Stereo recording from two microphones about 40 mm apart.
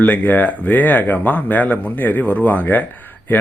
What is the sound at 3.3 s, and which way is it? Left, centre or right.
Speech, left.